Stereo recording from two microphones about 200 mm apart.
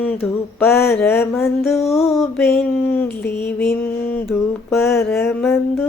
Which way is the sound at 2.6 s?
10° left (ahead or behind).